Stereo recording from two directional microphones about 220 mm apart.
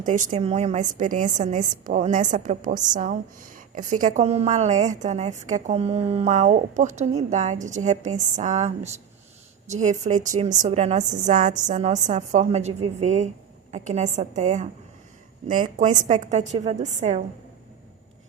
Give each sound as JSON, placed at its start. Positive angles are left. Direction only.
{"t": 0.0, "sound": "a woman's voice", "side_deg": -35}